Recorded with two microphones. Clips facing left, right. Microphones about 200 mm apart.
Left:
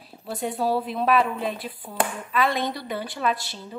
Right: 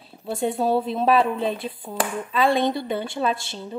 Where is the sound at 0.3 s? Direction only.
25° right (ahead or behind).